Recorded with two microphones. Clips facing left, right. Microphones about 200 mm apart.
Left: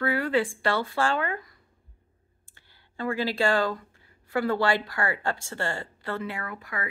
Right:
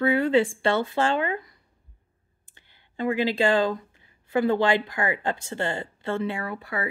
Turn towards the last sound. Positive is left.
turn(degrees=-30)  # may be behind; listen again after turning